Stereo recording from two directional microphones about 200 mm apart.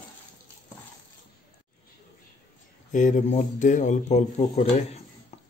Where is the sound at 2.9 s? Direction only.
40° left (ahead or behind).